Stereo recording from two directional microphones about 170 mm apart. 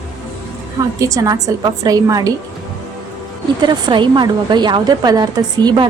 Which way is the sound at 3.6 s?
25° right (ahead or behind).